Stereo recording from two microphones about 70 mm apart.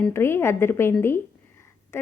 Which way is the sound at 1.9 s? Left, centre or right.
Left.